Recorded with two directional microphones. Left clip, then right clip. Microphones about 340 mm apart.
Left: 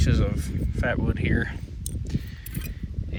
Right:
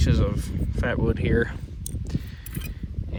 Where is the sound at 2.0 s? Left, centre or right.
Centre.